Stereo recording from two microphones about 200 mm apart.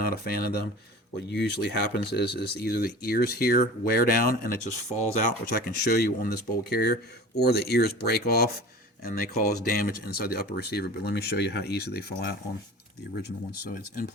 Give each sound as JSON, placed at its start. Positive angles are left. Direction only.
{"t": 0.0, "sound": "speech", "side_deg": 50}
{"t": 5.8, "sound": "speech", "side_deg": 55}
{"t": 13.7, "sound": "speech", "side_deg": 45}